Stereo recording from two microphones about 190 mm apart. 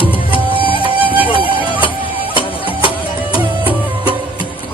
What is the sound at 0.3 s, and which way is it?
Music, 25° right (ahead or behind).